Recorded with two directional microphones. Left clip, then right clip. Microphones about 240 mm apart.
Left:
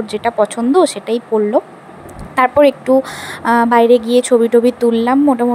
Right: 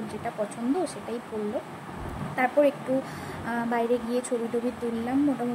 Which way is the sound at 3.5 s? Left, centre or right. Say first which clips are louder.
Left 17 dB; left.